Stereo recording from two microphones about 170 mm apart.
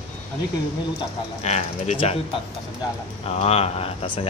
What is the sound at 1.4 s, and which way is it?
Speech, 40° left (ahead or behind).